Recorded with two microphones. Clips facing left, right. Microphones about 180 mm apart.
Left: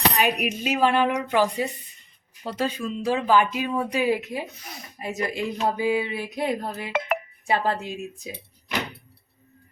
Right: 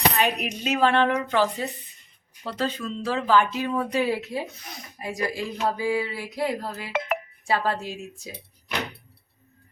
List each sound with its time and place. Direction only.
0.2 s speech: 10° left (ahead or behind)